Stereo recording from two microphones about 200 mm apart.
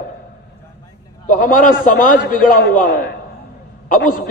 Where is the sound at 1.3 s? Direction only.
40° left (ahead or behind).